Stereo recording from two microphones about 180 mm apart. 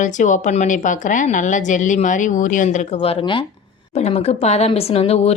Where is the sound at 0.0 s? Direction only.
45° left (ahead or behind).